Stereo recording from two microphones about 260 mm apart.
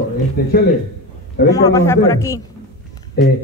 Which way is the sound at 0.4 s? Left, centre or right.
Left.